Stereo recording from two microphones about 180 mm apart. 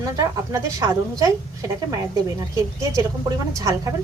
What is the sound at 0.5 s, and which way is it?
A woman's voice, 20° right (ahead or behind).